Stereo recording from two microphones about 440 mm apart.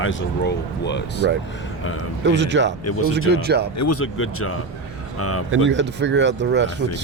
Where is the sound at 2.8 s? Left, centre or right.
Left.